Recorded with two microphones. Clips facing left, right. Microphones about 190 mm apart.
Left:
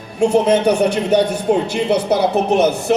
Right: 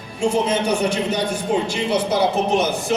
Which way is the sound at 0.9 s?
65° left (ahead or behind).